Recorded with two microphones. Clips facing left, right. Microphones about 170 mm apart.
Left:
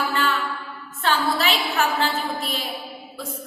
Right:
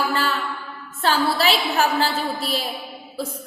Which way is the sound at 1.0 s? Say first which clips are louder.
Right 2 dB; 35° right (ahead or behind).